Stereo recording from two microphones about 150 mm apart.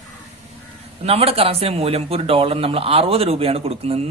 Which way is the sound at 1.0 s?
40° right (ahead or behind).